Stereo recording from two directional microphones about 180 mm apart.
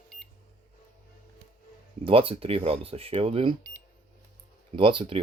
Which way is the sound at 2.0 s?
30° right (ahead or behind).